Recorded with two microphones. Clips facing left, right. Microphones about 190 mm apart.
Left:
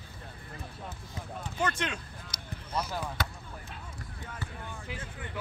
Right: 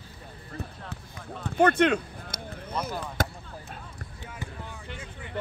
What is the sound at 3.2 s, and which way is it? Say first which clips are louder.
Basketball bounce: right 6 dB; 45° right (ahead or behind).